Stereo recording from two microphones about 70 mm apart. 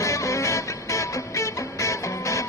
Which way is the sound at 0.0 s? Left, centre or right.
Left.